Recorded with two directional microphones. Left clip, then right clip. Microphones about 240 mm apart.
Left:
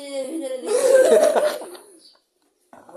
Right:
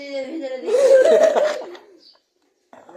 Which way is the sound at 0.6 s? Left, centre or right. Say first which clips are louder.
Right 3 dB; left.